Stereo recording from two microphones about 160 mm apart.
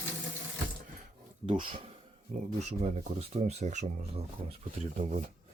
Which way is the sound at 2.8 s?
45° right (ahead or behind).